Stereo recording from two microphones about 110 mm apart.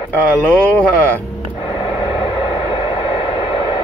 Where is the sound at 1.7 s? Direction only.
50° left (ahead or behind).